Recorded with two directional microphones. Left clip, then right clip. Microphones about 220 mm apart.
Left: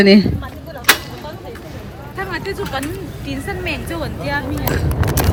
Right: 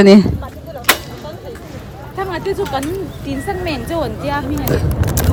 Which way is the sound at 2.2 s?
45° right (ahead or behind).